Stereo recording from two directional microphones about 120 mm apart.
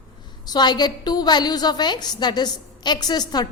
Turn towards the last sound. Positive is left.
turn(degrees=35)  # may be behind; listen again after turning